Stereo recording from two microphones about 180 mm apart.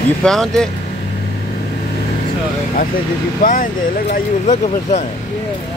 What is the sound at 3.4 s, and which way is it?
Speech, 50° left (ahead or behind).